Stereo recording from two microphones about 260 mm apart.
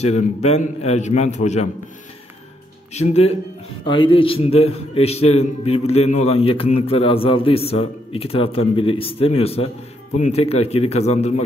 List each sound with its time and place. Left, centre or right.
0.0 s a man's voice: left
2.9 s a man's voice: left